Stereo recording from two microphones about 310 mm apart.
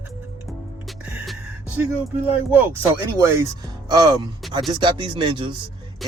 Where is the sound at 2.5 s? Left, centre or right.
Centre.